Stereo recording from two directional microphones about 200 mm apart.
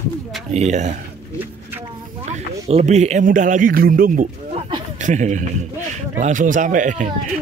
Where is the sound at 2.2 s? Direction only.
35° right (ahead or behind).